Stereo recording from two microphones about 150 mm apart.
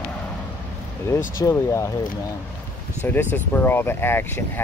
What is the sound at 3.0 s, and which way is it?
Speech, 15° left (ahead or behind).